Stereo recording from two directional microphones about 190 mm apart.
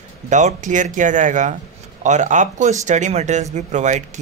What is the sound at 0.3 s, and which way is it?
Speech, 40° right (ahead or behind).